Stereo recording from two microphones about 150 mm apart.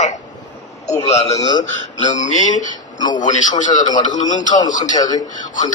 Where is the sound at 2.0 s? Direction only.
55° left (ahead or behind).